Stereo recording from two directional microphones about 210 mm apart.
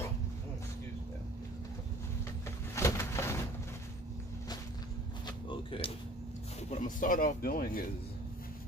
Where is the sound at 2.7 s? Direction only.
15° left (ahead or behind).